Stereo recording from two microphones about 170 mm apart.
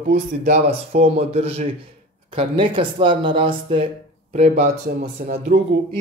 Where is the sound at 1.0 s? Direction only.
35° right (ahead or behind).